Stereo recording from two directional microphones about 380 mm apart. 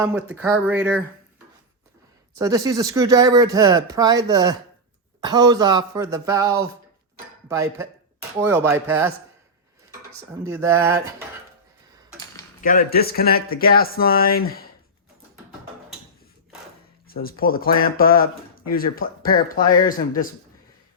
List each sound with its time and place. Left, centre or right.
0.0 s speech: centre
2.4 s speech: centre
10.4 s speech: centre
12.6 s speech: left
17.1 s speech: left